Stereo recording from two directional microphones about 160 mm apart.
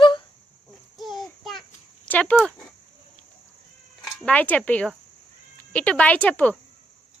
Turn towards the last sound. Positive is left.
turn(degrees=10)  # may be behind; listen again after turning